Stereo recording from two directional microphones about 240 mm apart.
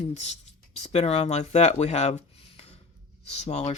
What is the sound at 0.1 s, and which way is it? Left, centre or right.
Speech, left.